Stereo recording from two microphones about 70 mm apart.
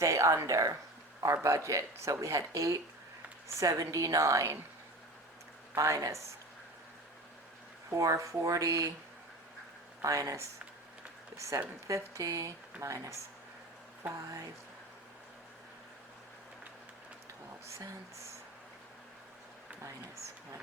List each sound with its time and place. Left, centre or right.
0.0 s a woman's voice: right
5.7 s a woman's voice: right
7.9 s a woman's voice: right
10.0 s a woman's voice: right
17.7 s speech: right
19.8 s speech: right